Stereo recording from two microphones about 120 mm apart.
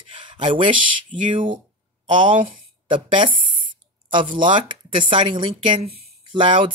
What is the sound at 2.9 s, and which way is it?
Speech, 45° right (ahead or behind).